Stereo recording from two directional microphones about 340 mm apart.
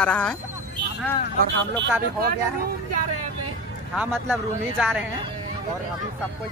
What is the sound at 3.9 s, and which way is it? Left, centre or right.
Speech, centre.